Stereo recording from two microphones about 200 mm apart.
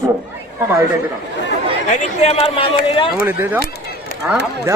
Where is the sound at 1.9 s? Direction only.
35° left (ahead or behind).